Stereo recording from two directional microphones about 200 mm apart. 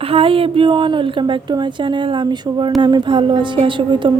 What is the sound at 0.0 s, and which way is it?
Speech, 30° right (ahead or behind).